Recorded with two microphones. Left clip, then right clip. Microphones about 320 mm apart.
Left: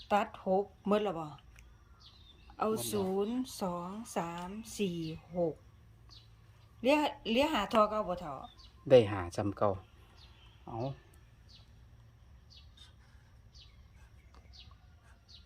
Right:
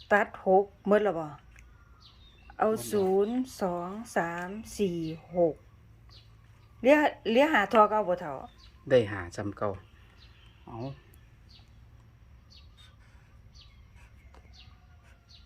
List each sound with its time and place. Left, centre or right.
0.1 s speech: centre
2.6 s speech: centre
6.8 s speech: centre
8.9 s speech: left